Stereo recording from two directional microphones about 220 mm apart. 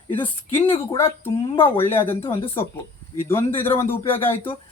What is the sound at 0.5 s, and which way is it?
Speech, 25° left (ahead or behind).